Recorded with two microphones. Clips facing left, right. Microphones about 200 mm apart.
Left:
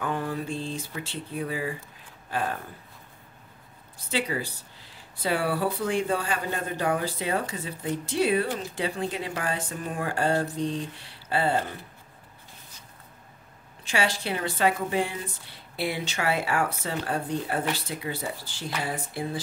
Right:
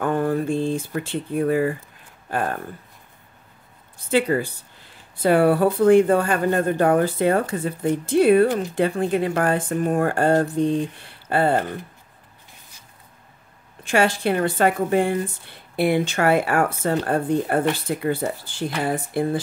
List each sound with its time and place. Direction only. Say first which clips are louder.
0.0 s speech: right 8 dB; 50° right (ahead or behind)
4.1 s speech: right 9 dB; 55° right (ahead or behind)
13.8 s speech: right 8 dB; 55° right (ahead or behind)